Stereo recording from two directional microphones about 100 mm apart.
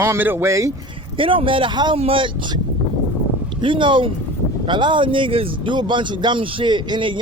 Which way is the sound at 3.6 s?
55° right (ahead or behind).